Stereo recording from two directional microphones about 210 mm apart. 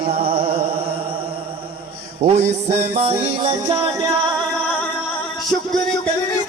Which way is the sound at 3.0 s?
25° right (ahead or behind).